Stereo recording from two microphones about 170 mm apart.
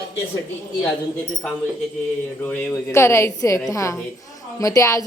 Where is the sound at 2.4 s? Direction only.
10° left (ahead or behind).